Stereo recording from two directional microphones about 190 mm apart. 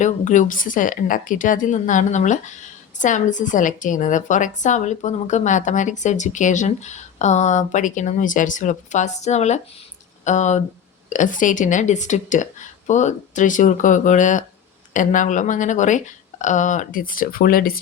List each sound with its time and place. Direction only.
0.0 s a woman's voice: 40° left (ahead or behind)